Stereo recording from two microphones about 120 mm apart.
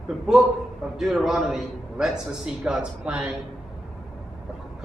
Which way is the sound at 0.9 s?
5° right (ahead or behind).